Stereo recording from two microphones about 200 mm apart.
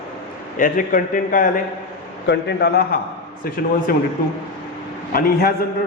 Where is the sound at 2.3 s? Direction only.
55° left (ahead or behind).